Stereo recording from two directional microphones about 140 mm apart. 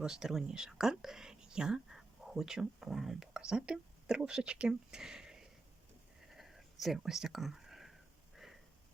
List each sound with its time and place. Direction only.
0.0 s speech: 5° right (ahead or behind)
6.3 s whispering: centre (ahead or behind)